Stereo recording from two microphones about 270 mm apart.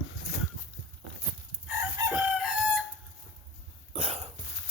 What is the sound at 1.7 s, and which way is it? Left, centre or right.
Chicken, centre.